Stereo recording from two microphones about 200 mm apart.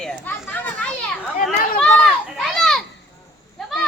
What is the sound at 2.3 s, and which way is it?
Children playing, centre (ahead or behind).